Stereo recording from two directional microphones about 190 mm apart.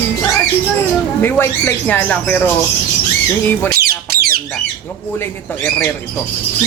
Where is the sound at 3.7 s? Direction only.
55° right (ahead or behind).